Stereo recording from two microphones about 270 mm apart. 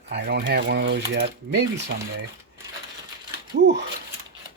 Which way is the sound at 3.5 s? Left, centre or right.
Right.